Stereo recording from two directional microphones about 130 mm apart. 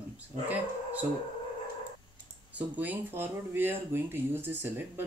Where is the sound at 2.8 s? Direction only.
15° right (ahead or behind).